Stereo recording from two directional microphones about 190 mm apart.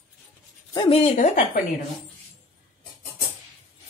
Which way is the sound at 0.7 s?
30° left (ahead or behind).